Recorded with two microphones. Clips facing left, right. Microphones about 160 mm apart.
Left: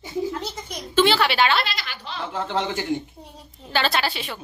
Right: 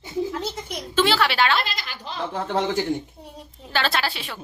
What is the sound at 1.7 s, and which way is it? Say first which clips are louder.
Speech: even; 40° right (ahead or behind).